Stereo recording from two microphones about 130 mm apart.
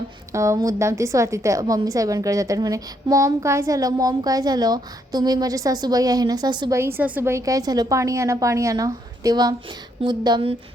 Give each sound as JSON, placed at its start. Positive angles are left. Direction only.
{"t": 0.3, "sound": "a woman's voice", "side_deg": -25}
{"t": 6.7, "sound": "a woman's voice", "side_deg": -20}